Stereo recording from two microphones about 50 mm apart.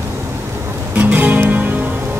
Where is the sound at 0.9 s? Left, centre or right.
Right.